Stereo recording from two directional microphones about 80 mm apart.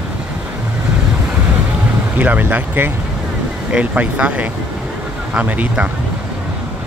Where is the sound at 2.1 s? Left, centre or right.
Right.